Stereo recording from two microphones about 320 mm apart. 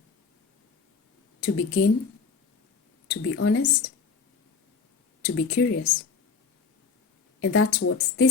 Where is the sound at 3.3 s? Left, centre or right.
Left.